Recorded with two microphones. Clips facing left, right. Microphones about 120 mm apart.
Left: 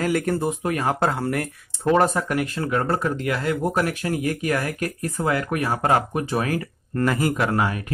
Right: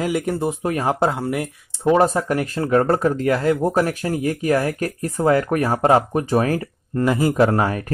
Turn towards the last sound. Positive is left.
turn(degrees=-35)  # may be behind; listen again after turning